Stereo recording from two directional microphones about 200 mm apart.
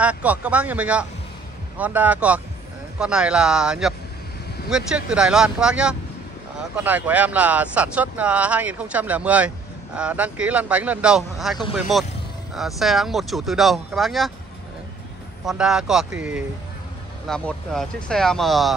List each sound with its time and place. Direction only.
0.0 s speech: 5° right (ahead or behind)
15.4 s speech: 5° right (ahead or behind)